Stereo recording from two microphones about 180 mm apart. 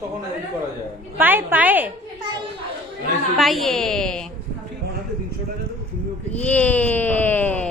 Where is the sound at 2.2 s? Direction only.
25° right (ahead or behind).